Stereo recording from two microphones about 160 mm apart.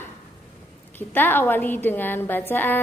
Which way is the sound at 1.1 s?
10° left (ahead or behind).